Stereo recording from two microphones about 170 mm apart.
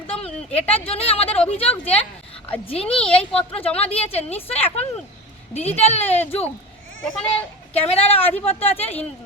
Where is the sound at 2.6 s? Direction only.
35° left (ahead or behind).